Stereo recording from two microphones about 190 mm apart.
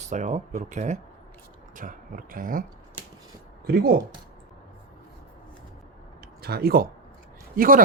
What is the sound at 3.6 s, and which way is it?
Speech, 55° right (ahead or behind).